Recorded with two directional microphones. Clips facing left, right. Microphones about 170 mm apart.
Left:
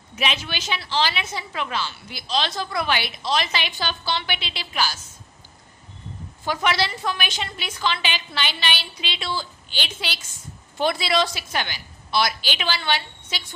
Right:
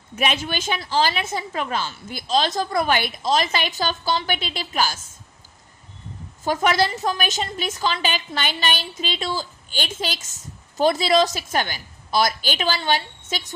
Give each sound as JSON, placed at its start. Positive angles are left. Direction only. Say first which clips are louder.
{"t": 0.2, "sound": "a woman's voice", "louder": "right 4 dB", "side_deg": -50}
{"t": 6.4, "sound": "a woman's voice", "louder": "right 4 dB", "side_deg": -45}